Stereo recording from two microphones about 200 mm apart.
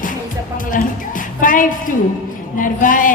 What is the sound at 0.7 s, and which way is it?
Music, 40° left (ahead or behind).